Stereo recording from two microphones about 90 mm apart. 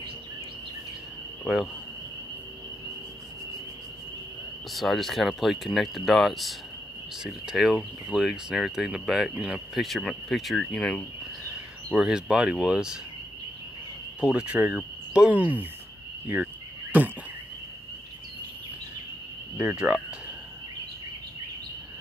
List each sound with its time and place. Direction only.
1.4 s speech: centre (ahead or behind)
4.7 s speech: centre (ahead or behind)
11.9 s speech: 10° right (ahead or behind)
14.2 s speech: 10° right (ahead or behind)
16.9 s a sound: 20° right (ahead or behind)
19.5 s speech: 10° right (ahead or behind)